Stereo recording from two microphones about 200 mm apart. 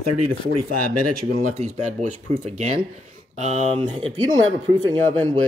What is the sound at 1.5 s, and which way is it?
Speech, 35° right (ahead or behind).